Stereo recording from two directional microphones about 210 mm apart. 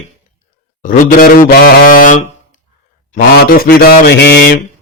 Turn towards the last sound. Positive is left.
turn(degrees=50)  # may be behind; listen again after turning